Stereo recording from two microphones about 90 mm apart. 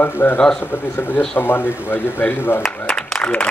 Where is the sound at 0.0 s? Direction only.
20° left (ahead or behind).